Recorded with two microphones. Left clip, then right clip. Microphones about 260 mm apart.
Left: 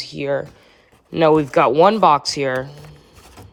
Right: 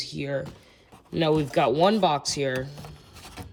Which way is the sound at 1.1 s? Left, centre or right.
Centre.